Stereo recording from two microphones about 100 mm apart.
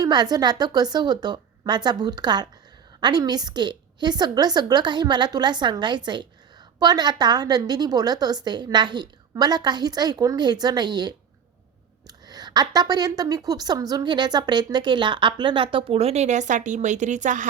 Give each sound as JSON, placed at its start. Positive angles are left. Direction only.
{"t": 0.0, "sound": "a woman's voice", "side_deg": -40}